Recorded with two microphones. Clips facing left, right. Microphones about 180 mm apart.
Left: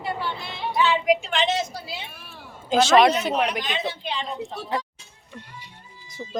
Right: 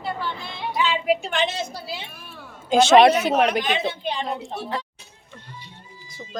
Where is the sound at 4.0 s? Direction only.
45° right (ahead or behind).